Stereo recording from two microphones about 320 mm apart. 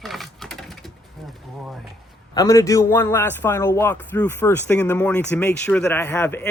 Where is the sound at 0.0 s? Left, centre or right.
Centre.